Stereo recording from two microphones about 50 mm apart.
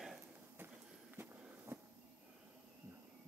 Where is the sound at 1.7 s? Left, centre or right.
Right.